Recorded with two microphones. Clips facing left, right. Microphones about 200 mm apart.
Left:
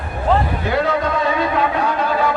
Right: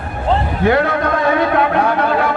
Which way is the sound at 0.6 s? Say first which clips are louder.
Right 4 dB; 60° right (ahead or behind).